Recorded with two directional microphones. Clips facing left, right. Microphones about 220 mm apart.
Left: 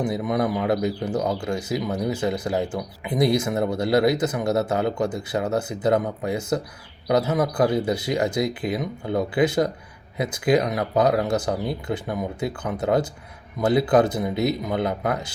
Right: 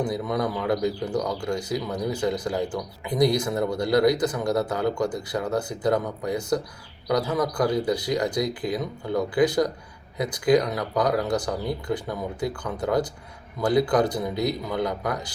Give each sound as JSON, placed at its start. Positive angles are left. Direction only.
{"t": 0.0, "sound": "speech", "side_deg": 20}